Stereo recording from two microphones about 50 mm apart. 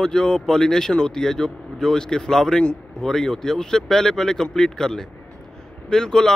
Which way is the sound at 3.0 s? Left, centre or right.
Centre.